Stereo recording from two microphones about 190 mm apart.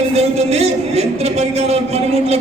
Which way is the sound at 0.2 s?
35° right (ahead or behind).